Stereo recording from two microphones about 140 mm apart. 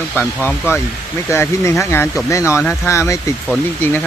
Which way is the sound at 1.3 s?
20° left (ahead or behind).